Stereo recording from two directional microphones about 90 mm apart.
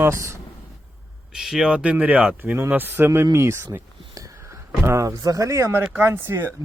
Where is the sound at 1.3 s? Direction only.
5° right (ahead or behind).